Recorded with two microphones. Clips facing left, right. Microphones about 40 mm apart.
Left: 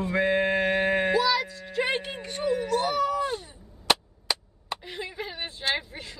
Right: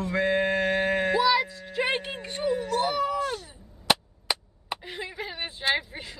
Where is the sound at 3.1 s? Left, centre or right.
Centre.